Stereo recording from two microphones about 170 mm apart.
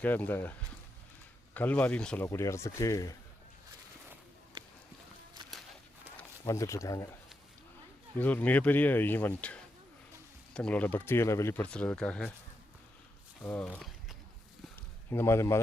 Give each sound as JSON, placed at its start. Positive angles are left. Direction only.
{"t": 0.0, "sound": "speech", "side_deg": 10}
{"t": 1.5, "sound": "speech", "side_deg": 10}
{"t": 6.1, "sound": "speech", "side_deg": 15}
{"t": 8.2, "sound": "speech", "side_deg": 10}
{"t": 13.4, "sound": "a sound", "side_deg": 10}
{"t": 14.8, "sound": "speech", "side_deg": 15}